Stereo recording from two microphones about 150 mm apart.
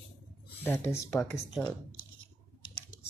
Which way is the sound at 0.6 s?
15° left (ahead or behind).